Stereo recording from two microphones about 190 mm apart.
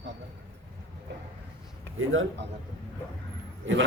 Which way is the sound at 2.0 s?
90° right.